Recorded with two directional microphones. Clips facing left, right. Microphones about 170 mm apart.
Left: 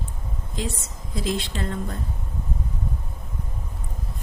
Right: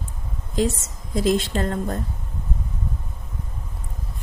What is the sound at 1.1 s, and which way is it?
Speech, 45° right (ahead or behind).